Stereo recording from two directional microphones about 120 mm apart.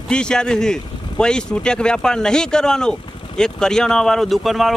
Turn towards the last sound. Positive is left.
turn(degrees=0)  # may be behind; listen again after turning